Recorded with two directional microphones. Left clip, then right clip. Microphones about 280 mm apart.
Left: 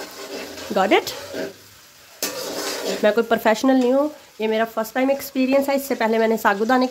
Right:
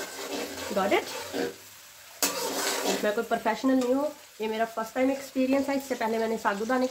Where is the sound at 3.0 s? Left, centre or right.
Left.